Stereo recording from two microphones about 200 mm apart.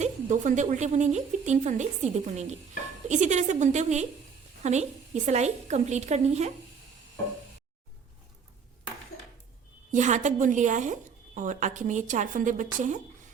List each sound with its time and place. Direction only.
0.0 s speech: 35° right (ahead or behind)
9.9 s speech: 35° right (ahead or behind)